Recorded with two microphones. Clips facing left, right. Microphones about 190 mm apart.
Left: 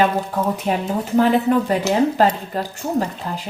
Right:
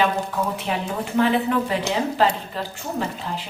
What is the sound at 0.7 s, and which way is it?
A woman's voice, 45° left (ahead or behind).